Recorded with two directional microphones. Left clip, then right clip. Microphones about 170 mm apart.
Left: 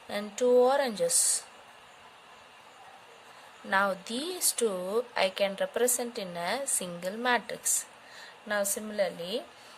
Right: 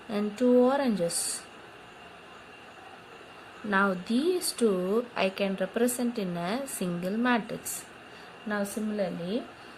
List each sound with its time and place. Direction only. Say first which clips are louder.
0.1 s a sound: even; 40° left (ahead or behind)
3.7 s speech: right 1 dB; 40° left (ahead or behind)
8.4 s speech: left 1 dB; 55° left (ahead or behind)